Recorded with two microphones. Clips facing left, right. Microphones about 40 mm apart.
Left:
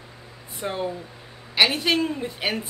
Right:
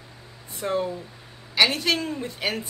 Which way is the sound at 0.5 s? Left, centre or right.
Centre.